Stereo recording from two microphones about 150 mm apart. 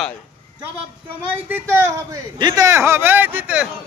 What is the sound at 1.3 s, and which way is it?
Speech, 15° right (ahead or behind).